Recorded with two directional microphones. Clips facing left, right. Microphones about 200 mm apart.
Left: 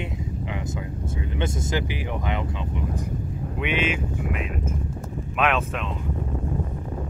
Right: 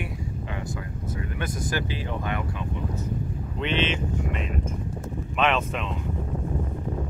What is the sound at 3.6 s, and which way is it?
Speech, 10° left (ahead or behind).